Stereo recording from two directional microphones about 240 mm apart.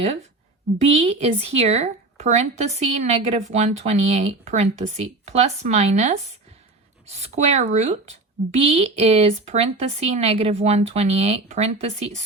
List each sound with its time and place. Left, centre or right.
0.0 s a woman's voice: right